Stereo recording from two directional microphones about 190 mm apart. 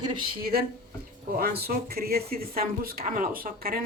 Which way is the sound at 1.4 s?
55° right (ahead or behind).